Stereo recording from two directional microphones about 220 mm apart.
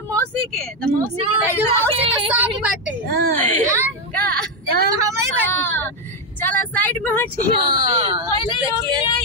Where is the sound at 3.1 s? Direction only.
45° right (ahead or behind).